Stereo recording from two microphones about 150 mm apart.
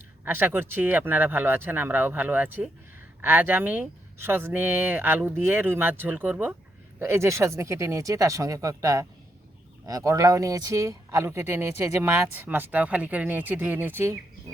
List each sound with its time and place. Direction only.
0.3 s speech: 15° right (ahead or behind)